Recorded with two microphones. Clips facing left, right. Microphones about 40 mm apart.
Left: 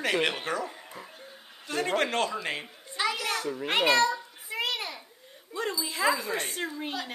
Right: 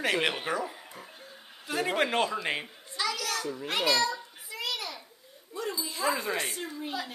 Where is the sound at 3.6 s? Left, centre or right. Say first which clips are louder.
Left 4 dB; left.